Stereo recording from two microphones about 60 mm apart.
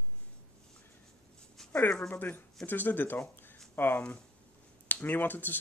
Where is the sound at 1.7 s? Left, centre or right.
Left.